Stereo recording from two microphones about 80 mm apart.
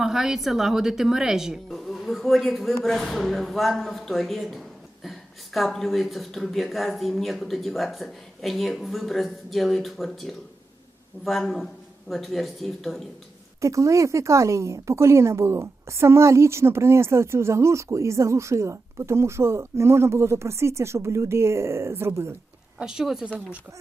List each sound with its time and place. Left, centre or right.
0.0 s speech: centre
13.6 s speech: right
22.8 s a woman's voice: centre